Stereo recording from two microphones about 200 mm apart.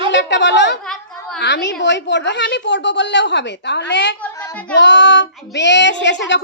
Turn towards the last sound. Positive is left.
turn(degrees=60)  # may be behind; listen again after turning